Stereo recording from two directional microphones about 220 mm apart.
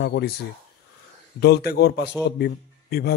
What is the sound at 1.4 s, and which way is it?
A man's voice, 45° left (ahead or behind).